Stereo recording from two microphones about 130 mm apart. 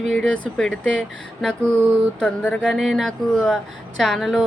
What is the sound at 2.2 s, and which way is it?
Speech, 10° left (ahead or behind).